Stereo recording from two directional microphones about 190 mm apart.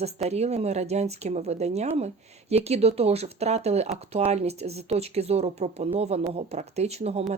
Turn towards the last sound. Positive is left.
turn(degrees=-35)  # may be behind; listen again after turning